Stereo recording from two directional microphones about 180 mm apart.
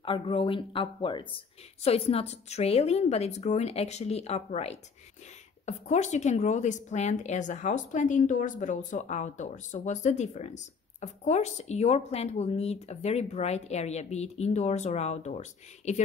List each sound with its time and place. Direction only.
0.0 s a woman's voice: 30° left (ahead or behind)